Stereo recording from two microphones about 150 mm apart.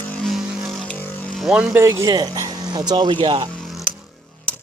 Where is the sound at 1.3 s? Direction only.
Centre (ahead or behind).